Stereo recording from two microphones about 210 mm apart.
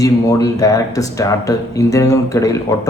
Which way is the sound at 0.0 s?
15° left (ahead or behind).